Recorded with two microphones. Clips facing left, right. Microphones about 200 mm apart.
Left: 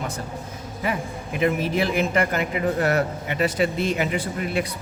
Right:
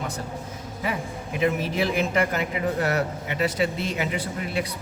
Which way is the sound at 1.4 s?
55° left (ahead or behind).